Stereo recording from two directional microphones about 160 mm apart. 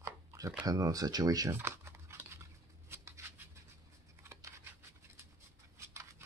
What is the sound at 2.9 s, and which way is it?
Scissors, 15° right (ahead or behind).